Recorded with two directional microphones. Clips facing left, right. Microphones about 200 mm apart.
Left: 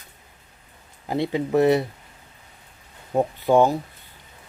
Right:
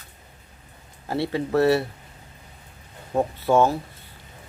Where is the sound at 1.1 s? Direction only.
15° left (ahead or behind).